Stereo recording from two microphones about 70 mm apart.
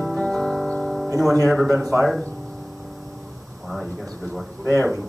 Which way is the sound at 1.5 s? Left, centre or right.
Centre.